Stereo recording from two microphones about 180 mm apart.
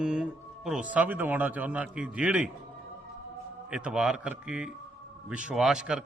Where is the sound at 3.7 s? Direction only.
5° right (ahead or behind).